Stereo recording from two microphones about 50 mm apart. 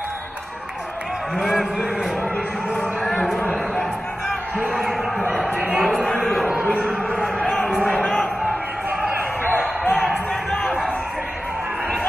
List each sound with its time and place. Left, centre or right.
3.3 s a sound: left
4.7 s speech: centre
5.5 s speech: right
7.3 s a man's voice: centre
9.9 s basketball bounce: centre